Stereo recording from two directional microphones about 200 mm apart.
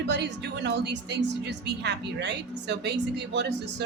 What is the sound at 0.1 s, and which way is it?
A woman's voice, 60° right (ahead or behind).